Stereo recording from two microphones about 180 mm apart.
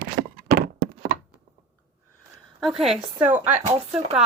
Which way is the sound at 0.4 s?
60° right (ahead or behind).